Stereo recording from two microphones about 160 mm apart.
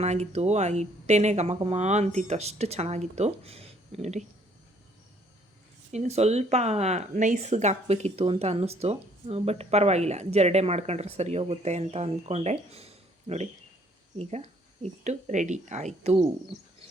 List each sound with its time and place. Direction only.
0.0 s speech: 45° right (ahead or behind)
5.9 s speech: 45° right (ahead or behind)